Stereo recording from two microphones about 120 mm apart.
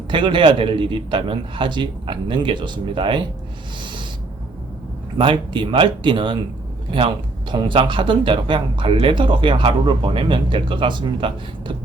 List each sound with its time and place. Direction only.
0.1 s speech: 45° right (ahead or behind)
5.1 s speech: 45° right (ahead or behind)